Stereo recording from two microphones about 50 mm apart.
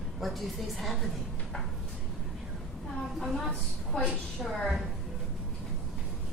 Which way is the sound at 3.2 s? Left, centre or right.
Centre.